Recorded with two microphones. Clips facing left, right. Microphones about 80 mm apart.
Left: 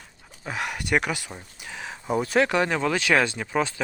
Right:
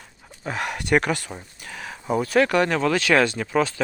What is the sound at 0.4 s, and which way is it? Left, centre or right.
Speech, centre.